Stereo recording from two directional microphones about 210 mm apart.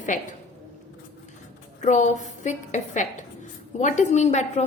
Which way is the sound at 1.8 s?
35° left (ahead or behind).